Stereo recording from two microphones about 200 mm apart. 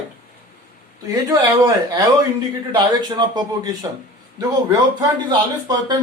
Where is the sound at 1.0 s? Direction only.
20° right (ahead or behind).